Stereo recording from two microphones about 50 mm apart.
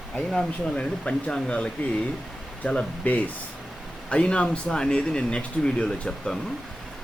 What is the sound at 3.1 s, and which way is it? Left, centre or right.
Speech, left.